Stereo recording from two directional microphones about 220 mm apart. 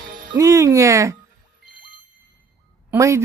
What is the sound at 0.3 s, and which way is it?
Speech, 15° right (ahead or behind).